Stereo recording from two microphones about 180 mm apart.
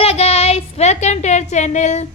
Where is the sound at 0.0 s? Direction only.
35° left (ahead or behind).